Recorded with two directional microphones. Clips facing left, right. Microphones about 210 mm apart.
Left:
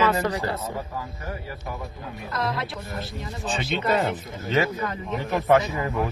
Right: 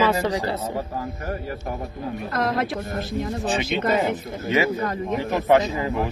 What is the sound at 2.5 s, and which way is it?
Speech, 50° right (ahead or behind).